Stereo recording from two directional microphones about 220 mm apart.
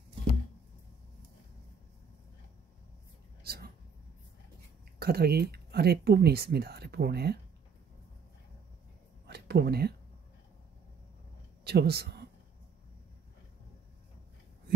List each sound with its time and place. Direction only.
3.4 s a sound: 45° right (ahead or behind)
4.9 s speech: 45° right (ahead or behind)
9.3 s speech: 45° right (ahead or behind)
11.6 s speech: 45° right (ahead or behind)